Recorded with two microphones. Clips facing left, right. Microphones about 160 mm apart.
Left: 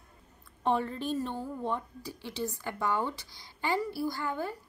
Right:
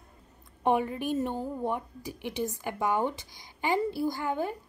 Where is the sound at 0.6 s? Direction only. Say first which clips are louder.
Right 3 dB; 15° right (ahead or behind).